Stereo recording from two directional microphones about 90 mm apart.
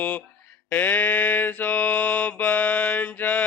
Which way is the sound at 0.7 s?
20° left (ahead or behind).